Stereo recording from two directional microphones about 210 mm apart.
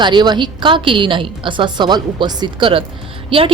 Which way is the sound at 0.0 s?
20° right (ahead or behind).